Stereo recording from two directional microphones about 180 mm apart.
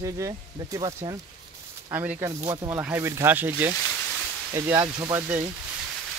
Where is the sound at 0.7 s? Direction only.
25° right (ahead or behind).